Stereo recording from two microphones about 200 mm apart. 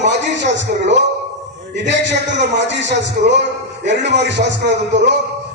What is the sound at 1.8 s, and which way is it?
A man's voice, 60° right (ahead or behind).